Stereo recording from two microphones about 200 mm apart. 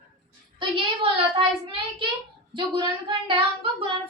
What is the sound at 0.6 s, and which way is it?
Speech, 25° right (ahead or behind).